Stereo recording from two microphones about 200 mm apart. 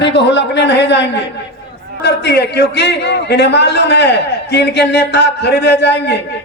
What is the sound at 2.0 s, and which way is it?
A man's voice, 55° left (ahead or behind).